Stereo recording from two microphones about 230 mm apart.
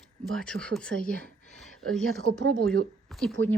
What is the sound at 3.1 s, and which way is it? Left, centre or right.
Speech, centre.